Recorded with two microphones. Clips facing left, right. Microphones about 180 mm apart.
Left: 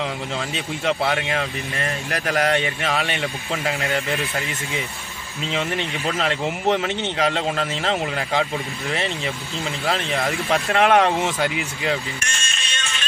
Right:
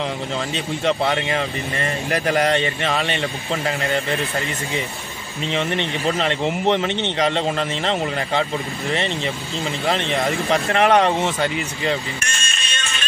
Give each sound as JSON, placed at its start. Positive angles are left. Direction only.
{"t": 0.8, "sound": "speech", "side_deg": 5}
{"t": 5.5, "sound": "speech", "side_deg": 5}
{"t": 12.3, "sound": "music", "side_deg": -50}